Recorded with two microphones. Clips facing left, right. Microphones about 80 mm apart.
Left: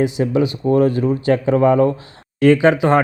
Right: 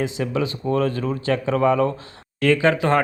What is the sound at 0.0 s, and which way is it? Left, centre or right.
Speech, left.